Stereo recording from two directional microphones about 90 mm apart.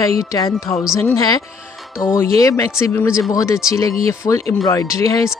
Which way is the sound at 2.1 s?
35° left (ahead or behind).